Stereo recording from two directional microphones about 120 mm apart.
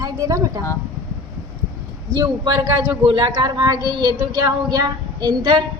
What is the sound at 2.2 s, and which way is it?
Speech, 30° right (ahead or behind).